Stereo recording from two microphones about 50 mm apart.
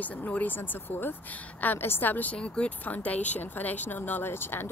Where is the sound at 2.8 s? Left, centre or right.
Left.